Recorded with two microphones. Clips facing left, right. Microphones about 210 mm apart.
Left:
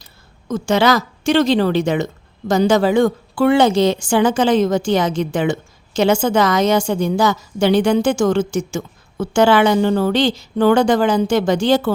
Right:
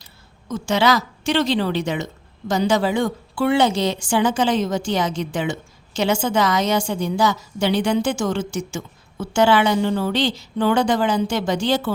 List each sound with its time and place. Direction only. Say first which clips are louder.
0.0 s a woman's voice: left 1 dB; 45° left (ahead or behind)